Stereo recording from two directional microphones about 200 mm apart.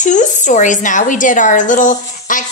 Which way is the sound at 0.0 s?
40° left (ahead or behind).